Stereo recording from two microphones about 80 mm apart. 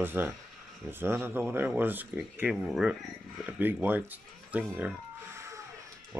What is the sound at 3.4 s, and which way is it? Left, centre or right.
Speech, right.